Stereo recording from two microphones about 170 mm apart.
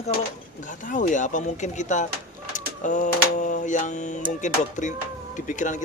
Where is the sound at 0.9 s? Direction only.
50° left (ahead or behind).